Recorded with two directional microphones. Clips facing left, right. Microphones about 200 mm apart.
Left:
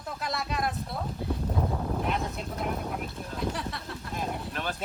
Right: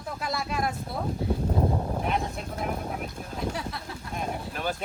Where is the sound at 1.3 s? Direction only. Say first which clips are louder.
Right 4 dB; 25° right (ahead or behind).